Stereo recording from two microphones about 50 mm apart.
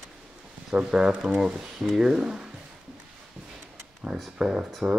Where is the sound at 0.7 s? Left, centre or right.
Centre.